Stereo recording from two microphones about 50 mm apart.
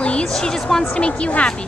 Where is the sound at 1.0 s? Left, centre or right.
Left.